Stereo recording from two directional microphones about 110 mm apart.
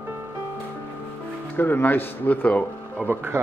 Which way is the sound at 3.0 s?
20° right (ahead or behind).